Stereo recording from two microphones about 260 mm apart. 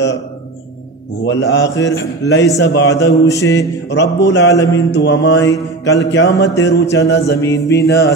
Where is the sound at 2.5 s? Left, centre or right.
Left.